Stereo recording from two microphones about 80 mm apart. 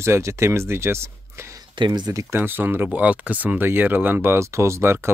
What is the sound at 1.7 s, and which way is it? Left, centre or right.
Speech, right.